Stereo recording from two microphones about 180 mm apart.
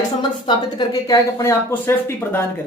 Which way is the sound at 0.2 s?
25° left (ahead or behind).